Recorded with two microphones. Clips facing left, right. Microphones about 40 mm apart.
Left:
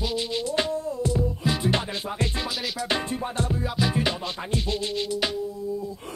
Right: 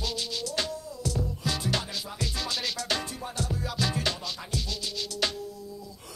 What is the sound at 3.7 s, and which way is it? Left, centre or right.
Music, centre.